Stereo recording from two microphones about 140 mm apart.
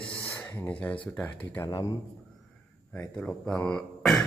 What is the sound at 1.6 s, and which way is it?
Speech, 25° left (ahead or behind).